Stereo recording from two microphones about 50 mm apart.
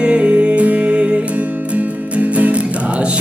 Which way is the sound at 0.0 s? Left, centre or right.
Right.